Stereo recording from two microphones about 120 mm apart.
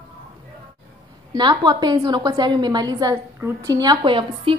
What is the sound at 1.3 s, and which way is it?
A woman's voice, 40° right (ahead or behind).